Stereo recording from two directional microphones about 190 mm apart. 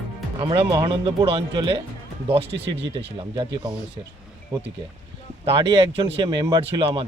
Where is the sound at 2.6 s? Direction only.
70° right (ahead or behind).